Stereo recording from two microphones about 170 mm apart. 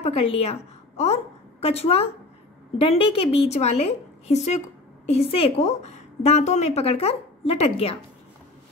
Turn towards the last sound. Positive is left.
turn(degrees=35)  # may be behind; listen again after turning